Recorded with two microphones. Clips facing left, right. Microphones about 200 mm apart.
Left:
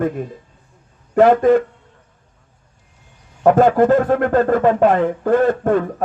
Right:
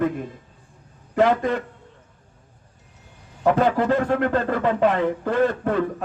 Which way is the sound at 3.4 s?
50° left (ahead or behind).